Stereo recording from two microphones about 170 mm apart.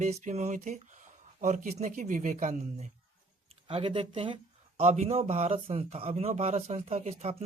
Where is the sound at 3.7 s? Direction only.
35° right (ahead or behind).